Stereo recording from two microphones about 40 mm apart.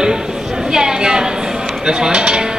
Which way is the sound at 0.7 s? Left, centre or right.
Centre.